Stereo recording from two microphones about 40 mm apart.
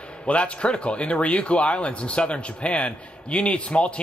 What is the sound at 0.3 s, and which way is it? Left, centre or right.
Speech, left.